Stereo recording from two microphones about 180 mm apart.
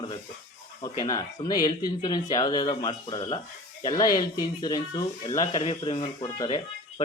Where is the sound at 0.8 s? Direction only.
20° left (ahead or behind).